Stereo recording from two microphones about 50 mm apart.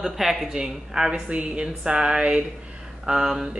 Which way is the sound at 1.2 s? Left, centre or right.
Right.